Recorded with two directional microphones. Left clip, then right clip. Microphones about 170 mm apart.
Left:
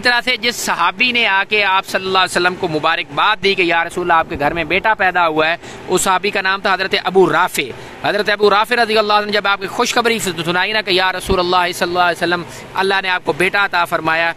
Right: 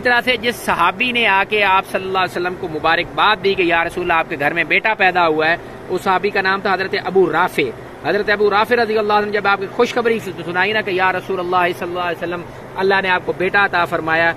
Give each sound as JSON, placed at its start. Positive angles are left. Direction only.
{"t": 0.0, "sound": "speech", "side_deg": 25}
{"t": 11.9, "sound": "speech", "side_deg": 40}
{"t": 12.7, "sound": "speech", "side_deg": 20}